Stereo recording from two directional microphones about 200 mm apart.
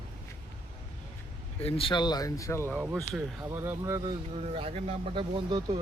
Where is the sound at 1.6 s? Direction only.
25° left (ahead or behind).